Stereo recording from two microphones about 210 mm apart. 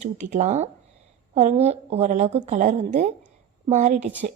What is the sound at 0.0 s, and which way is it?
A woman's voice, 35° right (ahead or behind).